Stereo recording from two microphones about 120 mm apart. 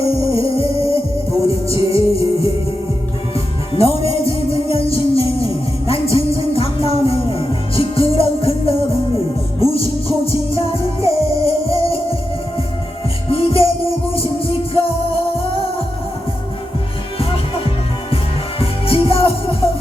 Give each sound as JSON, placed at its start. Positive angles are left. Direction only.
{"t": 0.0, "sound": "music", "side_deg": 55}
{"t": 13.3, "sound": "music", "side_deg": 50}
{"t": 18.6, "sound": "music", "side_deg": 55}